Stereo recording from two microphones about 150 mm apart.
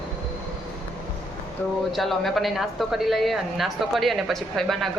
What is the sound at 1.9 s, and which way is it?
A woman's voice, centre (ahead or behind).